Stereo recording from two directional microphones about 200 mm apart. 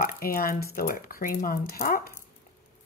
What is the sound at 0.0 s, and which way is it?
Speech, 45° left (ahead or behind).